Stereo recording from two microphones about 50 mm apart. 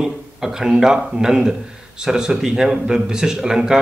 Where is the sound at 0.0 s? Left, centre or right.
Centre.